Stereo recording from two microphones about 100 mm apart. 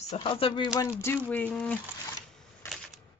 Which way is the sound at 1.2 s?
15° left (ahead or behind).